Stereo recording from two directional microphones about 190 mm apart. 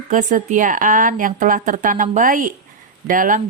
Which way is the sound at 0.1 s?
45° right (ahead or behind).